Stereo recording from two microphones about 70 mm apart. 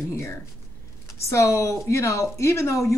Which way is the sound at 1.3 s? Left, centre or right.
Left.